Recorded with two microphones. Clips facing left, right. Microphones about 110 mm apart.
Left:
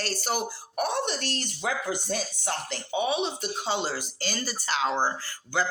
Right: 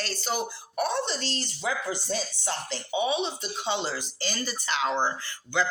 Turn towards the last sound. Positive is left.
turn(degrees=40)  # may be behind; listen again after turning